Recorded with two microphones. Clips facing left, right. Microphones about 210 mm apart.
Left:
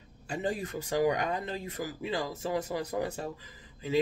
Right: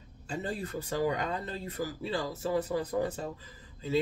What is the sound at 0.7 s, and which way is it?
Speech, 15° left (ahead or behind).